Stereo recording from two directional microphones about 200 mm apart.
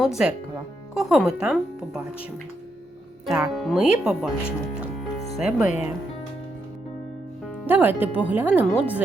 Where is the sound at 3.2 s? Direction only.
Centre (ahead or behind).